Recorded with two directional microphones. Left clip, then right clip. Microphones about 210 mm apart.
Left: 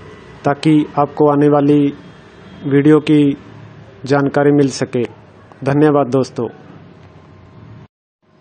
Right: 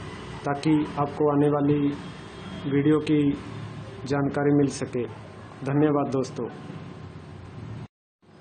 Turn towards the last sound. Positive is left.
turn(degrees=35)  # may be behind; listen again after turning